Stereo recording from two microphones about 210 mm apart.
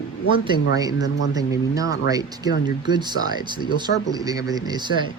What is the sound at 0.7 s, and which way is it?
Speech, 15° right (ahead or behind).